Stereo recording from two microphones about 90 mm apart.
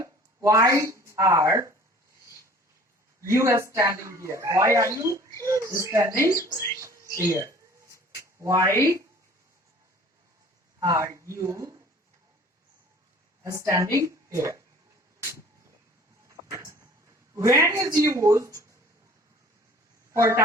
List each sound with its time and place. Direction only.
0.0 s speech: 35° right (ahead or behind)
3.2 s speech: 35° right (ahead or behind)
6.7 s a sound: 35° right (ahead or behind)
10.8 s speech: 35° right (ahead or behind)
13.4 s a woman's voice: 35° right (ahead or behind)
16.5 s speech: 35° right (ahead or behind)
20.1 s speech: 30° right (ahead or behind)